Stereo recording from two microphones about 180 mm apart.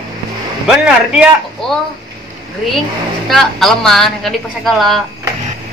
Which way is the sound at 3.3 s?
Centre (ahead or behind).